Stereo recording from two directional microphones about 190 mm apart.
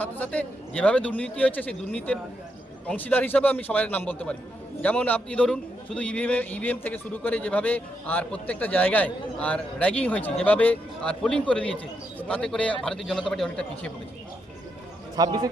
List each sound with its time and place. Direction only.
0.0 s a man's voice: 10° left (ahead or behind)
15.1 s a man's voice: 20° right (ahead or behind)